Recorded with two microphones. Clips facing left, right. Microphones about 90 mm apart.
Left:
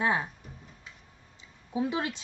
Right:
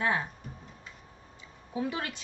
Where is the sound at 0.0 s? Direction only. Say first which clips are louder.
Left 2 dB; 20° left (ahead or behind).